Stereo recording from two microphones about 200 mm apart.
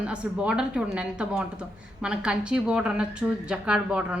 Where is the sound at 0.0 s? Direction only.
5° right (ahead or behind).